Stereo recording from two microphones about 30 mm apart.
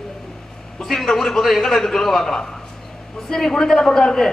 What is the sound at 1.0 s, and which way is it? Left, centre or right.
A man's voice, centre.